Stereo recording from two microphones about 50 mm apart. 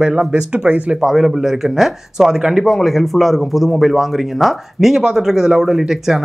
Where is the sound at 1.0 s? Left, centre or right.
Centre.